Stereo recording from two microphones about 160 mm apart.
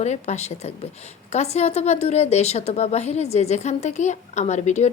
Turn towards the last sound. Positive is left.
turn(degrees=45)  # may be behind; listen again after turning